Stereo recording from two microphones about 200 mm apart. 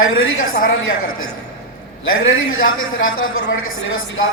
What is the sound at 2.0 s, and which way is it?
A man's voice, 80° left.